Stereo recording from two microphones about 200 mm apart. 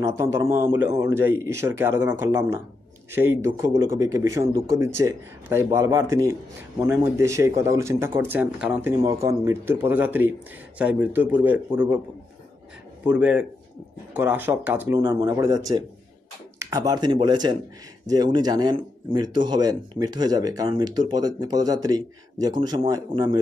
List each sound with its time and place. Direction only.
0.0 s speech: 15° right (ahead or behind)
13.0 s speech: 5° right (ahead or behind)